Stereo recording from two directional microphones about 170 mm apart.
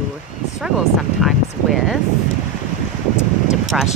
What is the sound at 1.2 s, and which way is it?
Vehicle, centre (ahead or behind).